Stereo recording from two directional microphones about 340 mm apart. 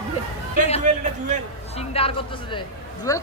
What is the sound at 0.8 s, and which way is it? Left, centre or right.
Speech, right.